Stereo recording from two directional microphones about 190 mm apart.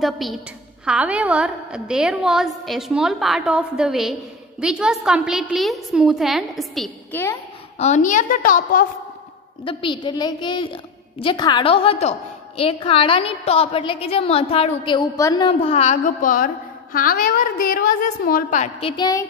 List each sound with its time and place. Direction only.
0.0 s a woman's voice: centre (ahead or behind)
7.8 s a woman's voice: 40° left (ahead or behind)
9.7 s a woman's voice: 25° left (ahead or behind)